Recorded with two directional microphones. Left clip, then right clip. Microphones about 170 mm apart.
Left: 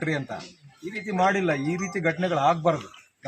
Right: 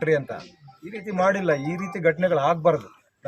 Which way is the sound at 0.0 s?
30° right (ahead or behind).